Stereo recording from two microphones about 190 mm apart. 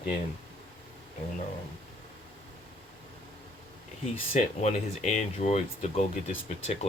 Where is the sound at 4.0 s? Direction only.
35° left (ahead or behind).